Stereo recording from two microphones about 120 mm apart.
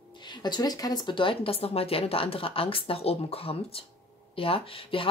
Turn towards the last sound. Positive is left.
turn(degrees=50)  # may be behind; listen again after turning